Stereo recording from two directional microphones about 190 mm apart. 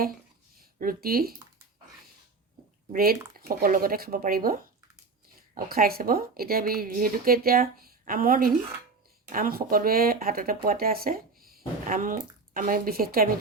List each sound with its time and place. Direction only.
0.6 s speech: 50° right (ahead or behind)
2.9 s speech: 50° right (ahead or behind)